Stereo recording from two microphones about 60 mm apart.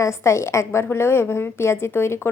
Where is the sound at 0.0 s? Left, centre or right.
Left.